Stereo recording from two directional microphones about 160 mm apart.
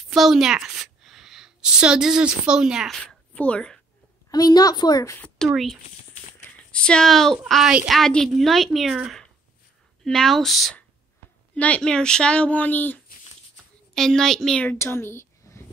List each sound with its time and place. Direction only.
0.1 s a woman's voice: centre (ahead or behind)
3.0 s a sound: 5° left (ahead or behind)
4.3 s a woman's voice: 25° left (ahead or behind)
5.2 s a woman's voice: centre (ahead or behind)